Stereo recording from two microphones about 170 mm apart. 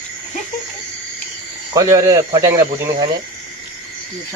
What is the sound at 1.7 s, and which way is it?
Speech, 20° right (ahead or behind).